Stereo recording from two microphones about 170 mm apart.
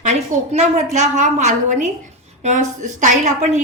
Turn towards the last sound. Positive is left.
turn(degrees=-45)  # may be behind; listen again after turning